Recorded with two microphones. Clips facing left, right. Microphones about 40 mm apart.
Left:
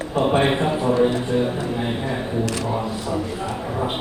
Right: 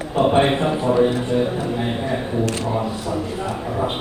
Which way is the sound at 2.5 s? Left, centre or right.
Right.